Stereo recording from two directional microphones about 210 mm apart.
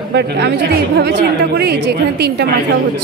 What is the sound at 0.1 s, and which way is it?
A woman's voice, 55° right (ahead or behind).